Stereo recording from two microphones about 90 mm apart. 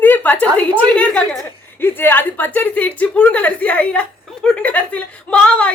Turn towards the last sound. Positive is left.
turn(degrees=15)  # may be behind; listen again after turning